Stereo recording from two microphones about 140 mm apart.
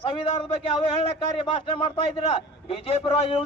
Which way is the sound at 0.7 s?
40° left (ahead or behind).